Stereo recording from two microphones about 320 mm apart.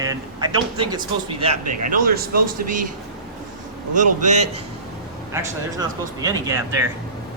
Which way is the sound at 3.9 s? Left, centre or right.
Right.